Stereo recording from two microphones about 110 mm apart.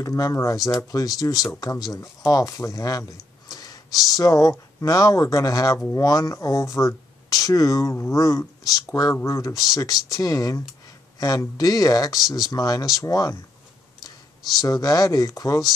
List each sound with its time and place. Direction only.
0.0 s a man's voice: 30° left (ahead or behind)
14.6 s speech: 35° left (ahead or behind)